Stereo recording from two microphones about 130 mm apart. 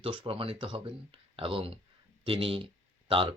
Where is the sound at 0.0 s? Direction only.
40° right (ahead or behind).